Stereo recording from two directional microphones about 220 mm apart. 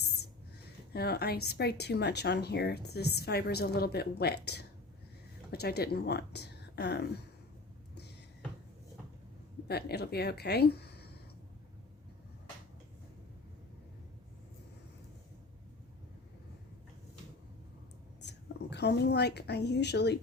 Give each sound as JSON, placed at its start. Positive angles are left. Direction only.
{"t": 0.9, "sound": "speech", "side_deg": 45}
{"t": 5.5, "sound": "speech", "side_deg": 45}
{"t": 9.6, "sound": "speech", "side_deg": 45}
{"t": 18.2, "sound": "a woman's voice", "side_deg": 50}